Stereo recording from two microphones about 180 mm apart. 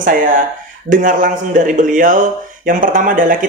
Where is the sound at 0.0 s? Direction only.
50° right (ahead or behind).